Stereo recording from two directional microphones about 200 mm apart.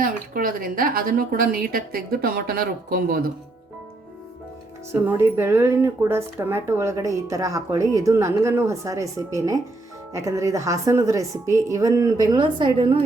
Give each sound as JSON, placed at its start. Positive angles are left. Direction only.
{"t": 0.0, "sound": "a woman's voice", "side_deg": -45}
{"t": 4.9, "sound": "speech", "side_deg": -10}